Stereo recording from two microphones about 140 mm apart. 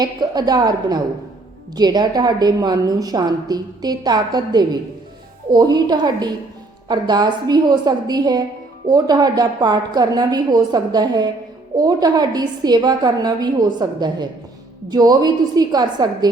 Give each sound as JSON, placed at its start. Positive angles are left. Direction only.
{"t": 0.0, "sound": "a woman's voice", "side_deg": -30}